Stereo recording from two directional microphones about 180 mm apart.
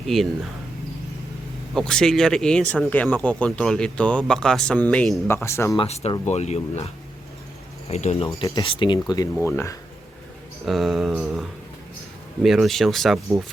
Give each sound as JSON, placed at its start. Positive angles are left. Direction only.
{"t": 0.1, "sound": "speech", "side_deg": 0}
{"t": 1.7, "sound": "speech", "side_deg": 5}
{"t": 5.3, "sound": "speech", "side_deg": 15}
{"t": 5.7, "sound": "speech", "side_deg": 30}
{"t": 10.7, "sound": "speech", "side_deg": 0}